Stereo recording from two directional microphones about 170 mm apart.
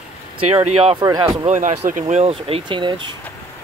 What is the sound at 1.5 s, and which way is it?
Speech, 45° right (ahead or behind).